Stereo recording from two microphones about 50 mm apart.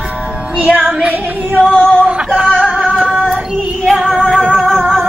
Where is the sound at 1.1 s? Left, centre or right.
Right.